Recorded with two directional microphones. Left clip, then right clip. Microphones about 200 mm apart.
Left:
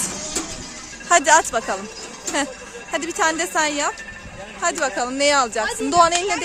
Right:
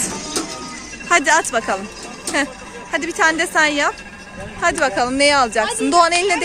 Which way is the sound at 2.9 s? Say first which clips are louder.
Right 4 dB; 15° left (ahead or behind).